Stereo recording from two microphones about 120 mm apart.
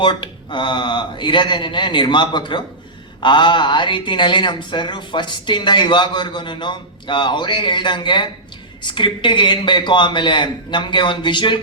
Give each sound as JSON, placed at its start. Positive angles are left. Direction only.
{"t": 0.0, "sound": "a woman's voice", "side_deg": 40}